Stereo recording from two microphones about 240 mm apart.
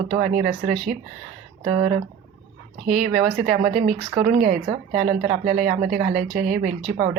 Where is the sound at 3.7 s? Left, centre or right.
Right.